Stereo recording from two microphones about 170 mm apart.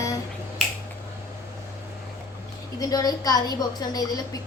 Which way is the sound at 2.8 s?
20° left (ahead or behind).